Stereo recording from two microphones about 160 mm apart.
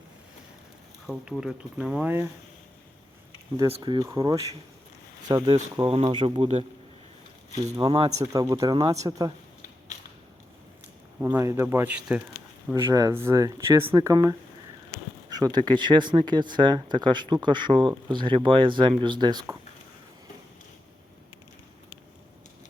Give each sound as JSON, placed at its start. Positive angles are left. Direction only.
{"t": 1.0, "sound": "speech", "side_deg": -5}
{"t": 3.7, "sound": "speech", "side_deg": -30}
{"t": 7.8, "sound": "speech", "side_deg": -30}
{"t": 8.1, "sound": "speech", "side_deg": -20}
{"t": 11.2, "sound": "speech", "side_deg": -15}
{"t": 12.9, "sound": "speech", "side_deg": -20}
{"t": 15.5, "sound": "speech", "side_deg": -25}